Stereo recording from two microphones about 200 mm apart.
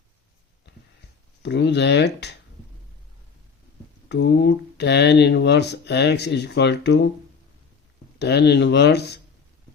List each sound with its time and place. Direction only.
1.4 s speech: 60° left (ahead or behind)
4.1 s speech: 60° left (ahead or behind)
8.2 s speech: 55° left (ahead or behind)